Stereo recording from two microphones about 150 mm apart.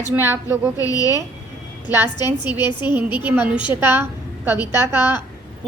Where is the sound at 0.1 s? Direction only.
15° right (ahead or behind).